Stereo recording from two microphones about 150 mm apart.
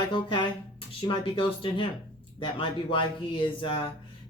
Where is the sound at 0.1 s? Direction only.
35° left (ahead or behind).